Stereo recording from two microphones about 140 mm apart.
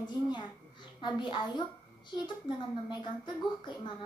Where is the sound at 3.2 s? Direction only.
35° left (ahead or behind).